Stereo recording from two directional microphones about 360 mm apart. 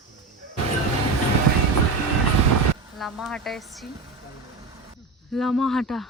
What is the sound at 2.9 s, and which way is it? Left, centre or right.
Speech, centre.